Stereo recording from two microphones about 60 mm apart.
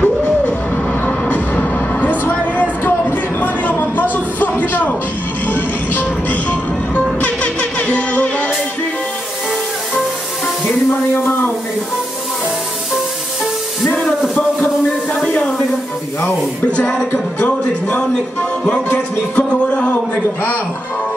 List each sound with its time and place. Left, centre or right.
0.0 s music: left
2.8 s a sound: left
5.5 s music: left
10.9 s a sound: left
15.2 s music: left
16.7 s speech: centre